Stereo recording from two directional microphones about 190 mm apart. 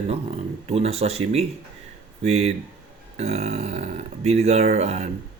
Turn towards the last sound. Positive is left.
turn(degrees=-35)  # may be behind; listen again after turning